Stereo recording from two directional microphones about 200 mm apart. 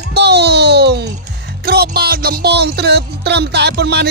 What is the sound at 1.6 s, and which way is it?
Speech, 50° right (ahead or behind).